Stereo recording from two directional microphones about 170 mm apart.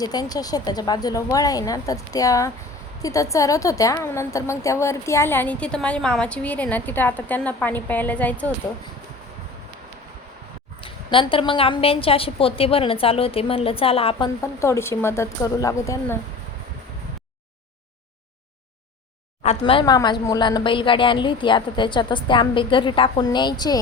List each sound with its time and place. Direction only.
0.0 s a woman's voice: 20° left (ahead or behind)
10.8 s a woman's voice: 30° left (ahead or behind)
14.4 s a woman's voice: 15° left (ahead or behind)
19.4 s speech: 35° left (ahead or behind)